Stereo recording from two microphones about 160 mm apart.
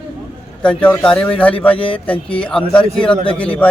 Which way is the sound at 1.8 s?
35° left (ahead or behind).